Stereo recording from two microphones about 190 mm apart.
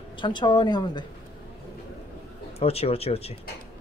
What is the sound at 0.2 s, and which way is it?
Speech, 25° left (ahead or behind).